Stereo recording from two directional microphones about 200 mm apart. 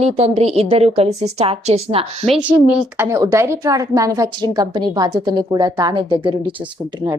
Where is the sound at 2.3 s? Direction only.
5° right (ahead or behind).